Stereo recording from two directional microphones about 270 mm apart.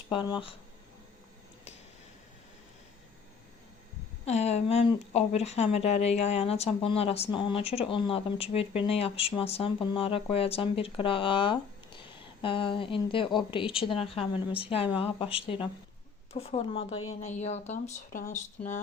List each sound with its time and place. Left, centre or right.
0.1 s speech: centre
4.3 s speech: left